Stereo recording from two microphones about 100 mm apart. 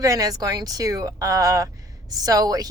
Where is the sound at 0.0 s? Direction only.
35° right (ahead or behind).